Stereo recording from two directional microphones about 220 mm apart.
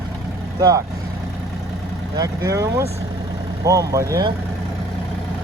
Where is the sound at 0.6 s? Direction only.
15° right (ahead or behind).